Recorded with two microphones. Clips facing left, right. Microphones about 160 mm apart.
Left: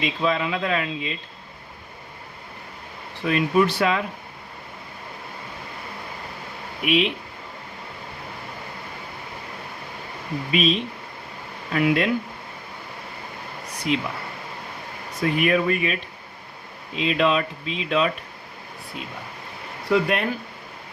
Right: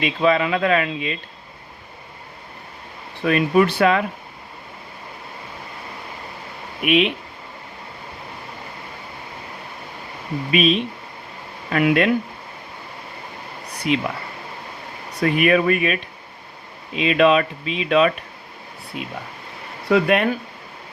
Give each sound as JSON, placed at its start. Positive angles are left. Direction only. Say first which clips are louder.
{"t": 0.0, "sound": "speech", "louder": "right 5 dB", "side_deg": -65}
{"t": 3.2, "sound": "speech", "louder": "right 3 dB", "side_deg": -60}
{"t": 6.8, "sound": "speech", "louder": "right 3 dB", "side_deg": -60}
{"t": 10.5, "sound": "speech", "louder": "right 4 dB", "side_deg": -65}
{"t": 13.9, "sound": "speech", "louder": "right 3 dB", "side_deg": -65}
{"t": 15.2, "sound": "speech", "louder": "right 4 dB", "side_deg": -70}
{"t": 19.9, "sound": "speech", "louder": "right 4 dB", "side_deg": -70}